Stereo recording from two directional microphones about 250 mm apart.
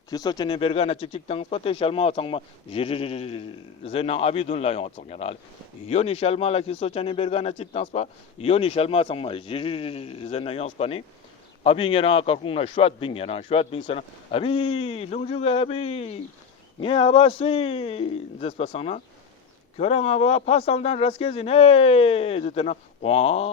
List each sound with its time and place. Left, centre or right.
0.1 s speech: centre